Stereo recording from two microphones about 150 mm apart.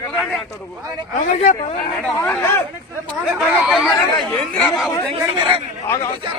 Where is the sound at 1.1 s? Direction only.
50° left (ahead or behind).